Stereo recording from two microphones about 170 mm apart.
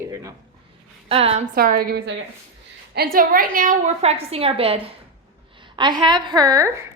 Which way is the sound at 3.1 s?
55° right (ahead or behind).